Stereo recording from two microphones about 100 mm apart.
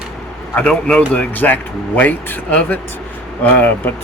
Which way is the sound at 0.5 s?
10° left (ahead or behind).